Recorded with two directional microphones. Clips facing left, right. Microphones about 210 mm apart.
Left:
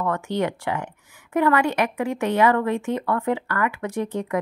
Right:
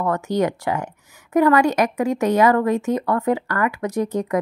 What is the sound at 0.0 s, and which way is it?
Speech, 40° right (ahead or behind).